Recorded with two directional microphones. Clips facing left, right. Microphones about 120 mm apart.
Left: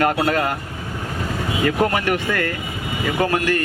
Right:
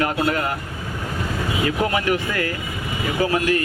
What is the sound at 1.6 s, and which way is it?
Speech, 45° left (ahead or behind).